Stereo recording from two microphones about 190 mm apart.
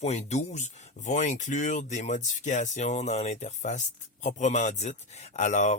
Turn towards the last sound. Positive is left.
turn(degrees=35)  # may be behind; listen again after turning